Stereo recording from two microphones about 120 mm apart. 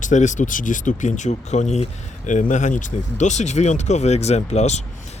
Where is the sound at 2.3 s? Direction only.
90° left.